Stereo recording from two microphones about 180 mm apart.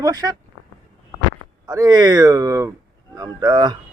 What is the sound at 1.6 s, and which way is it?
Speech, 20° right (ahead or behind).